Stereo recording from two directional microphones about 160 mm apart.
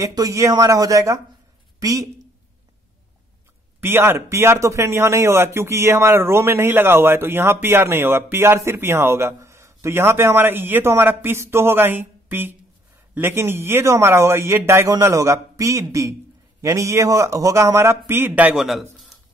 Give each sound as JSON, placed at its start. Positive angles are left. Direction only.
{"t": 0.0, "sound": "speech", "side_deg": -20}
{"t": 3.8, "sound": "speech", "side_deg": -15}